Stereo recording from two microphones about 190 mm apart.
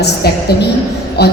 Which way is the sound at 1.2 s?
60° left (ahead or behind).